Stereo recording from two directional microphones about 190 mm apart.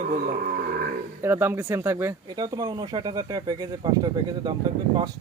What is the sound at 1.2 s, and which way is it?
Speech, 10° right (ahead or behind).